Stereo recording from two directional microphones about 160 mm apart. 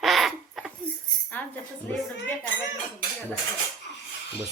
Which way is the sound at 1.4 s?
10° left (ahead or behind).